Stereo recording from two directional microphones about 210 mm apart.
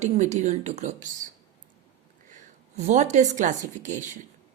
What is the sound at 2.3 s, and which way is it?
A woman's voice, 35° right (ahead or behind).